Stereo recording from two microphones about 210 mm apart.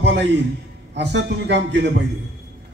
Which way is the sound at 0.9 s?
55° right (ahead or behind).